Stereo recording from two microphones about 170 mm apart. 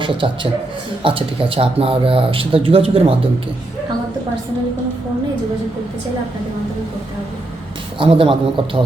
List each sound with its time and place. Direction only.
0.0 s a man's voice: 30° right (ahead or behind)
7.9 s speech: 30° right (ahead or behind)